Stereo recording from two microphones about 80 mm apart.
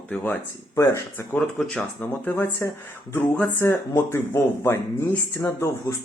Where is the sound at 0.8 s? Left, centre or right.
Left.